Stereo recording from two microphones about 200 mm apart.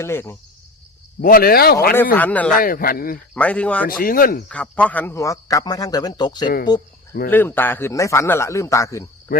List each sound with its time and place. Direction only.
0.0 s speech: 10° left (ahead or behind)
1.2 s speech: 50° left (ahead or behind)
2.1 s speech: 5° left (ahead or behind)
2.6 s speech: 45° left (ahead or behind)
3.3 s speech: 5° left (ahead or behind)
3.8 s speech: 45° left (ahead or behind)
4.4 s speech: 5° left (ahead or behind); by 6.5 s 20° left (ahead or behind)
7.3 s speech: 10° left (ahead or behind)
9.3 s speech: 45° left (ahead or behind)